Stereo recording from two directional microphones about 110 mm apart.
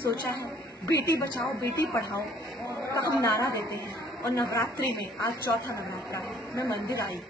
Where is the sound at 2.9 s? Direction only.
30° left (ahead or behind).